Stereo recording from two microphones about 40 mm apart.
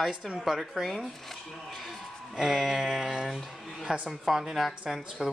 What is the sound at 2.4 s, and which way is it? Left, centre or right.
A woman's voice, centre.